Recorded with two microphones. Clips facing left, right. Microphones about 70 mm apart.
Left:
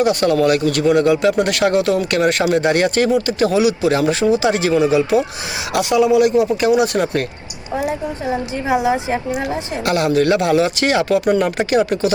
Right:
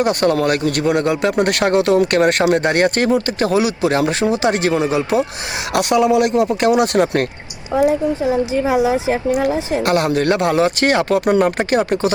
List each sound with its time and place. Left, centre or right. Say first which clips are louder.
0.0 s speech: left 1 dB; right
5.7 s speech: even; right
9.8 s speech: left 2 dB; right